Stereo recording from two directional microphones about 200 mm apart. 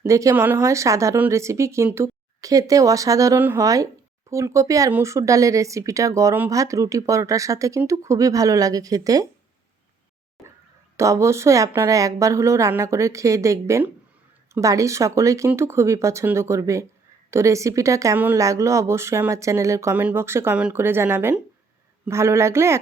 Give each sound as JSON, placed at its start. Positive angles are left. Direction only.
{"t": 0.0, "sound": "speech", "side_deg": -15}
{"t": 10.9, "sound": "speech", "side_deg": -15}